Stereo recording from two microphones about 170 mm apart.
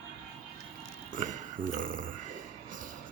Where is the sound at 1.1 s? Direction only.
50° right (ahead or behind).